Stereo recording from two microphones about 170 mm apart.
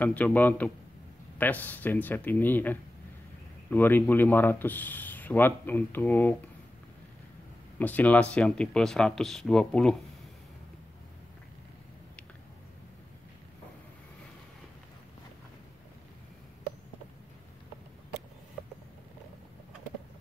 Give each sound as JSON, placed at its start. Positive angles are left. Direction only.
{"t": 0.0, "sound": "speech", "side_deg": 10}
{"t": 7.8, "sound": "speech", "side_deg": 10}